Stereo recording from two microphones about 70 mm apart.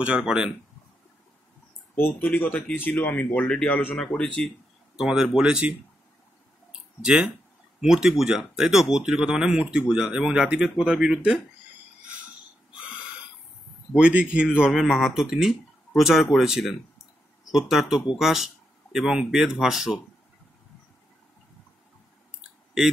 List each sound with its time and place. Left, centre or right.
0.0 s speech: centre
2.0 s speech: left; by 4.5 s centre
4.9 s speech: centre
7.0 s speech: centre
13.9 s speech: centre
14.7 s speech: centre